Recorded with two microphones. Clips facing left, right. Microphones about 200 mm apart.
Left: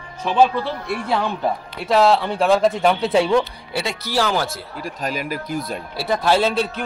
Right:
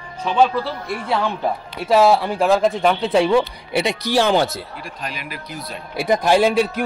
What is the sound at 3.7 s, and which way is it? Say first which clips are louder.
Speech: right 4 dB; 20° right (ahead or behind).